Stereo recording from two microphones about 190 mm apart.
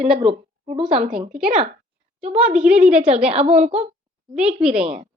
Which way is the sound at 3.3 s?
35° right (ahead or behind).